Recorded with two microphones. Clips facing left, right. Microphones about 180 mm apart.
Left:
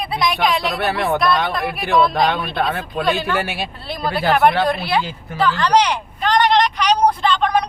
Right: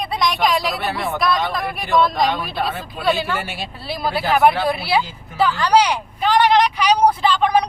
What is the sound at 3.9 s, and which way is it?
Speech, 5° right (ahead or behind).